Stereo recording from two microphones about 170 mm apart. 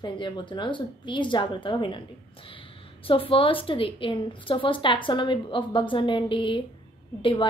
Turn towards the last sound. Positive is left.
turn(degrees=30)  # may be behind; listen again after turning